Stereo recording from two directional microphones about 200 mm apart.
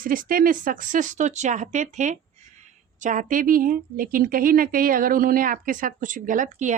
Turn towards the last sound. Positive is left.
turn(degrees=-40)  # may be behind; listen again after turning